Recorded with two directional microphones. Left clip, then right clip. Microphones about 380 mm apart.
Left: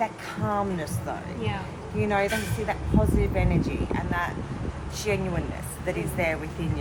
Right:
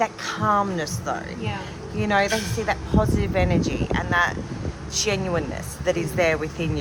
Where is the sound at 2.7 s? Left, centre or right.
Right.